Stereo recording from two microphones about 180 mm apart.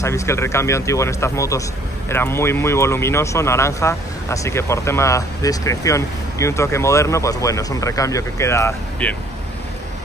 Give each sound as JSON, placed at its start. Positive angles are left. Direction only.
{"t": 0.0, "sound": "speech", "side_deg": 15}